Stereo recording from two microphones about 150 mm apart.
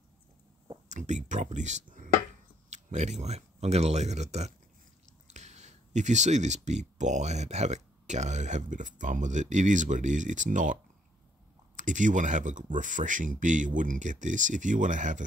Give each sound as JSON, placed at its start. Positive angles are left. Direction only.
{"t": 0.8, "sound": "speech", "side_deg": -55}